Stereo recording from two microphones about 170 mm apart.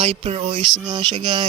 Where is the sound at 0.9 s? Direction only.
25° right (ahead or behind).